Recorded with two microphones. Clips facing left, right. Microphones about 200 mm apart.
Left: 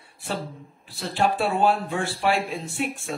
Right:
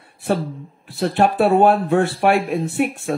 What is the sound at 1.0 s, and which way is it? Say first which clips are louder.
Speech: right 7 dB; 60° right (ahead or behind).